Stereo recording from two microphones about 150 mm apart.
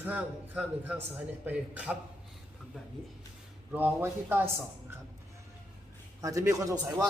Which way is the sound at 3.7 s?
10° right (ahead or behind).